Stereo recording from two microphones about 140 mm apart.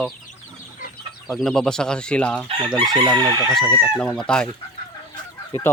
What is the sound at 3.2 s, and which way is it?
Chicken, 30° right (ahead or behind).